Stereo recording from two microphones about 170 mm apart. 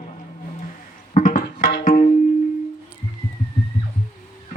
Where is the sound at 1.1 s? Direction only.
50° left (ahead or behind).